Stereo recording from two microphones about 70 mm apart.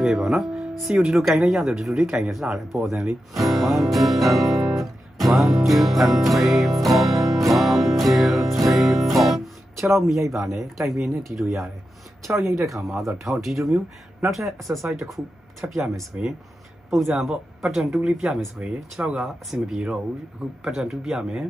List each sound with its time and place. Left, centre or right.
0.0 s speech: centre
3.3 s music: centre
8.6 s guitar: centre
10.6 s speech: centre
12.4 s speech: right
12.6 s speech: centre
16.1 s speech: right
17.1 s speech: centre